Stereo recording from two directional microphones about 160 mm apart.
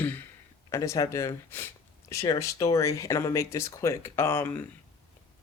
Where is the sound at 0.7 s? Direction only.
20° left (ahead or behind).